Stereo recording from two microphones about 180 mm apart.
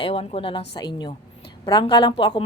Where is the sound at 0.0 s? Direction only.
30° left (ahead or behind).